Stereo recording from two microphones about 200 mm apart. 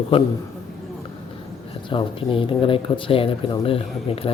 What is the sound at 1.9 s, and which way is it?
Speech, 25° left (ahead or behind).